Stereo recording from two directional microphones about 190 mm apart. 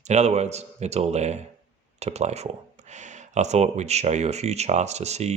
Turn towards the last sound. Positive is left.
turn(degrees=-35)  # may be behind; listen again after turning